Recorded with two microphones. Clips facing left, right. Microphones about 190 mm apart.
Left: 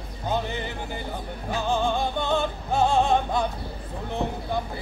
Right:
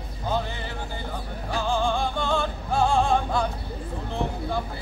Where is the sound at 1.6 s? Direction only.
20° left (ahead or behind).